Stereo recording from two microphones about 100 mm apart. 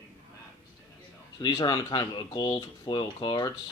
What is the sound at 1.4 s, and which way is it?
Speech, 40° left (ahead or behind).